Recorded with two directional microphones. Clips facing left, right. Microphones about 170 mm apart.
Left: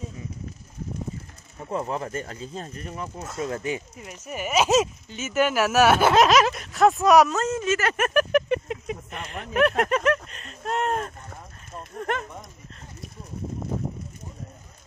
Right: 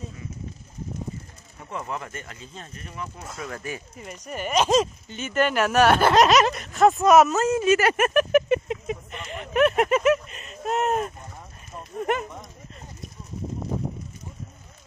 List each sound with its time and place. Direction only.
1.7 s speech: 30° left (ahead or behind)
3.9 s speech: 5° left (ahead or behind)